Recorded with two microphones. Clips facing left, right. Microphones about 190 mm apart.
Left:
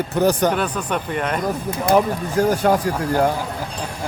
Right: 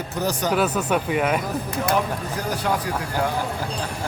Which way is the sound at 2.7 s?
50° left (ahead or behind).